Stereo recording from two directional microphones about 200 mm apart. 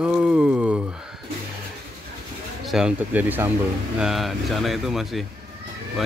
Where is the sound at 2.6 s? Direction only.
5° right (ahead or behind).